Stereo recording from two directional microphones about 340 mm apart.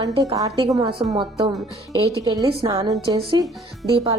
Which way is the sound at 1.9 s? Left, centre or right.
Centre.